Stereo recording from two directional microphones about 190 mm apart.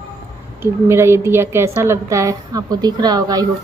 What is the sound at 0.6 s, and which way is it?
A woman's voice, 15° right (ahead or behind).